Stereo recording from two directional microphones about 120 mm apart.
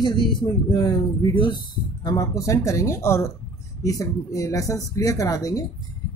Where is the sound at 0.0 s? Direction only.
40° left (ahead or behind).